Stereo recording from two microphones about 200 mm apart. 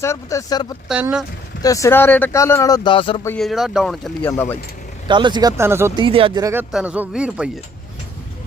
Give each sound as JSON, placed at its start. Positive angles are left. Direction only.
{"t": 0.0, "sound": "speech", "side_deg": 15}
{"t": 0.9, "sound": "speech", "side_deg": -5}
{"t": 1.6, "sound": "speech", "side_deg": 15}
{"t": 3.2, "sound": "speech", "side_deg": 0}
{"t": 5.0, "sound": "speech", "side_deg": -25}
{"t": 6.0, "sound": "speech", "side_deg": -25}
{"t": 6.5, "sound": "speech", "side_deg": -5}